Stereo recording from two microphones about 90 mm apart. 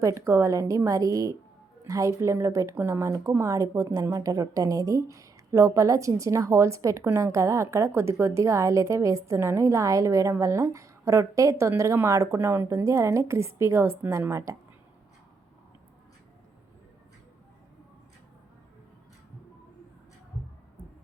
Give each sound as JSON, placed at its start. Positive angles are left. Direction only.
{"t": 0.0, "sound": "a woman's voice", "side_deg": -35}